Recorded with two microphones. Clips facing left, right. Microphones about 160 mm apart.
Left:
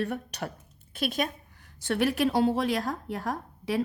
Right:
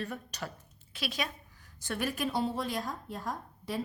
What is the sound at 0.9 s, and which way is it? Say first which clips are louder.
Speech: left 7 dB; 50° left (ahead or behind).